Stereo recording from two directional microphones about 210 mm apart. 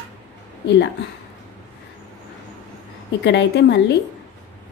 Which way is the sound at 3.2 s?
55° left (ahead or behind).